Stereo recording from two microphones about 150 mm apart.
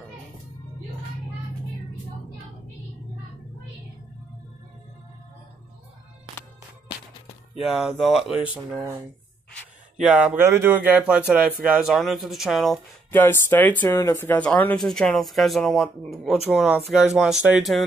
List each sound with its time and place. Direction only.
7.6 s speech: 5° right (ahead or behind)
9.9 s speech: 5° right (ahead or behind)
13.1 s speech: 15° left (ahead or behind); by 17.8 s centre (ahead or behind)